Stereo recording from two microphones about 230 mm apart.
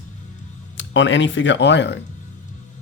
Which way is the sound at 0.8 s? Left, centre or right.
Left.